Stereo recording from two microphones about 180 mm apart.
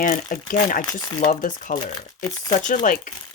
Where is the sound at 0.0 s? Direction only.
45° left (ahead or behind).